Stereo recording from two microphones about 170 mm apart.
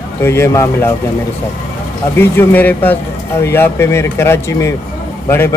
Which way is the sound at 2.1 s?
10° left (ahead or behind).